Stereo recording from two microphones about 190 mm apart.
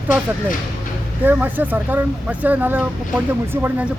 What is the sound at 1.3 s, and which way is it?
Speech, 10° right (ahead or behind).